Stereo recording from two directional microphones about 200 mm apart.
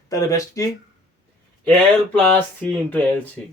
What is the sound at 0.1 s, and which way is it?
Speech, 15° left (ahead or behind).